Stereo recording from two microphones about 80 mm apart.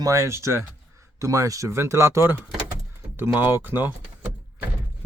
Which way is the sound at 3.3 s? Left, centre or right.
Right.